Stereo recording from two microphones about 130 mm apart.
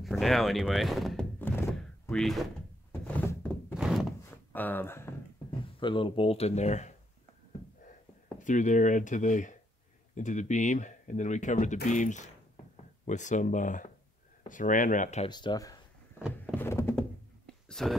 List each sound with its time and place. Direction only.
0.0 s speech: centre (ahead or behind)
2.9 s thunk: 15° left (ahead or behind)
3.7 s thunk: 5° right (ahead or behind)
4.3 s a sound: 15° left (ahead or behind)
5.8 s speech: 40° left (ahead or behind); by 6.9 s 60° left (ahead or behind)
8.5 s speech: 75° left (ahead or behind)
14.5 s speech: 90° left; by 15.2 s 70° left (ahead or behind)
15.2 s speech: 35° left (ahead or behind)
16.2 s a sound: 5° right (ahead or behind)
16.5 s thunk: 20° left (ahead or behind)
17.6 s whispering: 5° left (ahead or behind)